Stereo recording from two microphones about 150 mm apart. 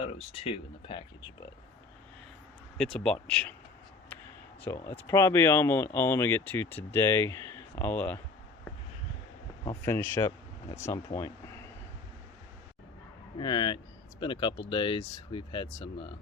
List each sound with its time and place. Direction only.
0.0 s speech: 40° left (ahead or behind)
2.7 s speech: 5° left (ahead or behind)
4.6 s speech: 20° left (ahead or behind)
9.8 s speech: 15° left (ahead or behind)
13.4 s speech: 30° left (ahead or behind)